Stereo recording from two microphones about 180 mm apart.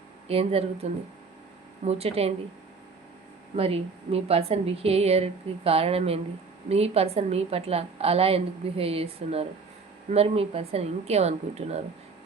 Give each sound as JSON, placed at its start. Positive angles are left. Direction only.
{"t": 0.3, "sound": "a woman's voice", "side_deg": -35}
{"t": 3.5, "sound": "a woman's voice", "side_deg": -35}